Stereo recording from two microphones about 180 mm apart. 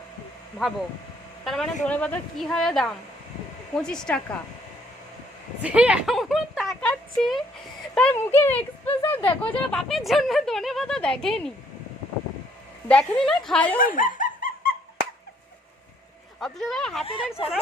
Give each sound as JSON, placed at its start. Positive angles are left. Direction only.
{"t": 1.5, "sound": "speech", "side_deg": 0}
{"t": 5.6, "sound": "speech", "side_deg": -5}
{"t": 12.9, "sound": "speech", "side_deg": 5}
{"t": 13.7, "sound": "a sound", "side_deg": 50}
{"t": 16.4, "sound": "speech", "side_deg": 0}
{"t": 17.1, "sound": "speech", "side_deg": 30}